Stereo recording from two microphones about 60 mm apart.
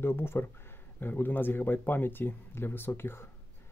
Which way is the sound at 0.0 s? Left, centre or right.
Left.